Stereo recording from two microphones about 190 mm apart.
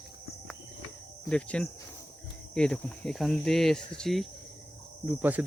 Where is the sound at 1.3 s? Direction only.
5° left (ahead or behind).